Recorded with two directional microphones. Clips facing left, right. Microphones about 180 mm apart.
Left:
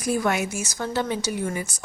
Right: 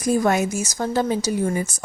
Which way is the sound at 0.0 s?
40° right (ahead or behind).